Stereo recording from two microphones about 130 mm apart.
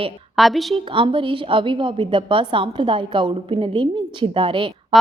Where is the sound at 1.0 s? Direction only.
40° right (ahead or behind).